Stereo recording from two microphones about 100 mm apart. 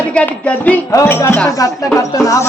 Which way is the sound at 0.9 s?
25° left (ahead or behind).